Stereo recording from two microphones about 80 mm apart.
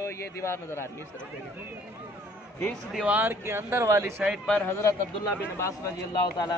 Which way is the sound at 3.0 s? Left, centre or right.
Right.